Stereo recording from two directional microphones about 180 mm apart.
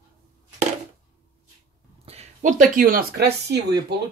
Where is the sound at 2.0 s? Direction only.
40° right (ahead or behind); by 3.8 s 65° right (ahead or behind).